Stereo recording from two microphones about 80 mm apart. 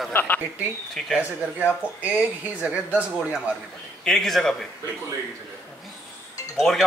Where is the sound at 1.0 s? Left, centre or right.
Centre.